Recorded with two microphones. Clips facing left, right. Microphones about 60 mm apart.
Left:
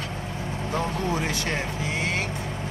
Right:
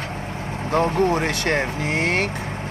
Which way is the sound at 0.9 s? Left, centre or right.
Right.